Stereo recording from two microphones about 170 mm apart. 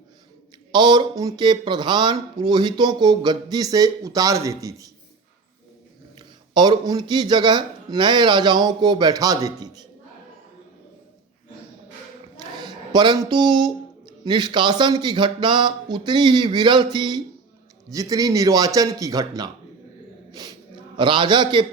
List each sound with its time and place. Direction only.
0.7 s speech: 25° right (ahead or behind)
6.1 s speech: 25° right (ahead or behind)
12.4 s a sound: 25° right (ahead or behind)
14.3 s speech: 25° right (ahead or behind)
20.9 s speech: 30° right (ahead or behind)